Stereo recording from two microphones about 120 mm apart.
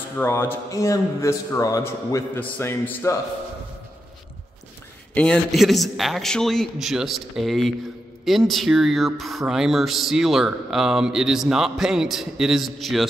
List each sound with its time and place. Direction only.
0.2 s a man's voice: 20° left (ahead or behind)
5.1 s speech: 10° left (ahead or behind)